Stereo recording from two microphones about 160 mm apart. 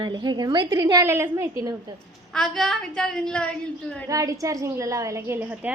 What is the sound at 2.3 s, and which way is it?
A woman's voice, 5° left (ahead or behind).